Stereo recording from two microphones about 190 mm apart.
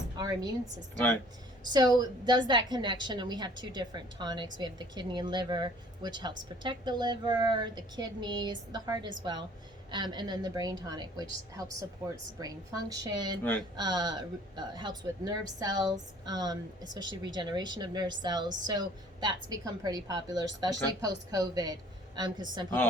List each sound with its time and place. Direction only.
0.2 s speech: 20° right (ahead or behind)
0.9 s speech: 10° left (ahead or behind)
1.7 s speech: 20° right (ahead or behind)
13.4 s speech: 10° left (ahead or behind)
13.7 s speech: 20° right (ahead or behind)